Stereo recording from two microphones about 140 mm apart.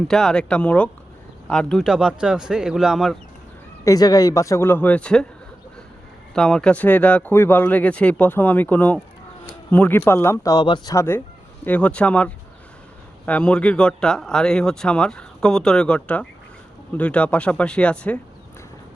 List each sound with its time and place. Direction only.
0.1 s speech: 5° left (ahead or behind)
1.8 s speech: 5° right (ahead or behind)
3.8 s speech: 25° left (ahead or behind); by 5.2 s 5° left (ahead or behind)
6.3 s speech: 5° left (ahead or behind); by 10.9 s 30° left (ahead or behind)
10.9 s speech: 15° left (ahead or behind)